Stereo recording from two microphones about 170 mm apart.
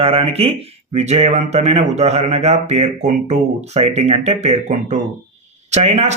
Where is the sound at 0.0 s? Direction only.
35° right (ahead or behind).